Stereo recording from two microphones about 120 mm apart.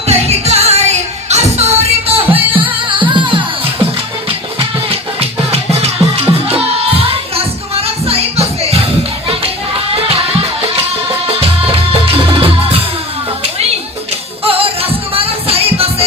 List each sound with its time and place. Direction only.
0.1 s music: 60° right (ahead or behind); by 3.8 s 45° right (ahead or behind)
5.5 s music: 60° right (ahead or behind)
14.4 s music: 50° right (ahead or behind)